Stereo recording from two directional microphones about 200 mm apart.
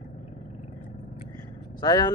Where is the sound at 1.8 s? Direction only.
20° left (ahead or behind).